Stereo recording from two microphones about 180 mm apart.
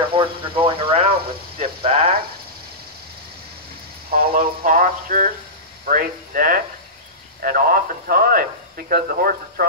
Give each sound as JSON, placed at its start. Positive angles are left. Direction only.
{"t": 0.1, "sound": "speech", "side_deg": -30}
{"t": 4.1, "sound": "a sound", "side_deg": -50}
{"t": 7.4, "sound": "radio", "side_deg": -50}